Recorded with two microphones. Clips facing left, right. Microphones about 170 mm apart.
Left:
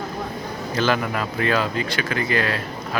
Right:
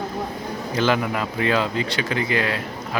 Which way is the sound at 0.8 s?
15° right (ahead or behind).